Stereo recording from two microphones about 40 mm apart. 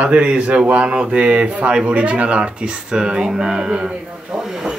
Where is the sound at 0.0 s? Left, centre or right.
Right.